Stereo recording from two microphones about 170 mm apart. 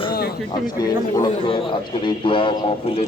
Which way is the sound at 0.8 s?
25° left (ahead or behind).